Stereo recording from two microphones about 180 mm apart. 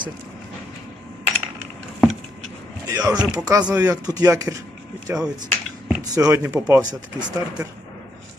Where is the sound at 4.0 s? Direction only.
20° right (ahead or behind).